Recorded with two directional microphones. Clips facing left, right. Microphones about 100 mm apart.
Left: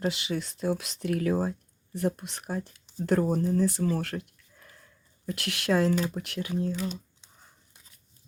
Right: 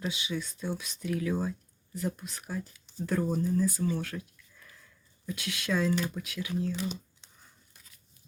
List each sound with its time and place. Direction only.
0.1 s speech: 80° left
1.3 s speech: 50° left (ahead or behind)
2.0 s speech: 65° left (ahead or behind)
3.1 s speech: 70° left (ahead or behind)
4.5 s a sound: 45° left (ahead or behind)
5.3 s speech: 70° left (ahead or behind)
5.9 s speech: 45° left (ahead or behind)
6.2 s speech: 60° left (ahead or behind)
6.7 s a sound: centre (ahead or behind)